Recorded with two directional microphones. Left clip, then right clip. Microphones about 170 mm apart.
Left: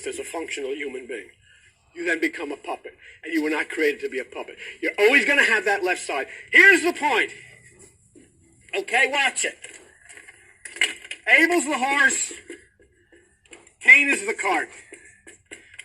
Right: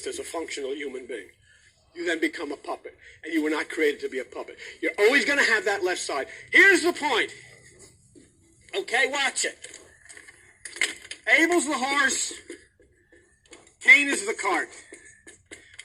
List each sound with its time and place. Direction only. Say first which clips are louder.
0.0 s a man's voice: left 2 dB; 20° left (ahead or behind)
8.8 s a man's voice: left 4 dB; 20° left (ahead or behind)
10.2 s coin: left 3 dB; 15° left (ahead or behind)
13.8 s music: left 3 dB; 15° left (ahead or behind)